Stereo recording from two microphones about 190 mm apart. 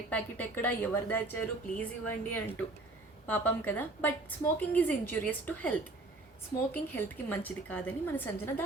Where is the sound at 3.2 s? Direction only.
10° left (ahead or behind).